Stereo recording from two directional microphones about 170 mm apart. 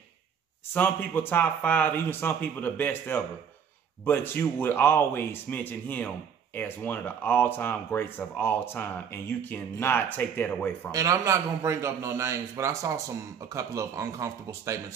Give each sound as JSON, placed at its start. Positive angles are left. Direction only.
{"t": 0.7, "sound": "speech", "side_deg": 10}
{"t": 10.9, "sound": "a man's voice", "side_deg": -20}